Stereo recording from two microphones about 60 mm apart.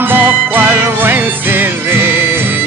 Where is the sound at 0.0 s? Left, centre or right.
Right.